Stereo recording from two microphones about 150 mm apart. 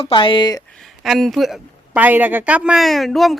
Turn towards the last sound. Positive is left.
turn(degrees=0)  # may be behind; listen again after turning